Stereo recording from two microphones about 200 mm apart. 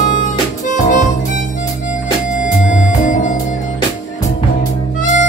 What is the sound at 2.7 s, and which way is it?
Music, 40° left (ahead or behind).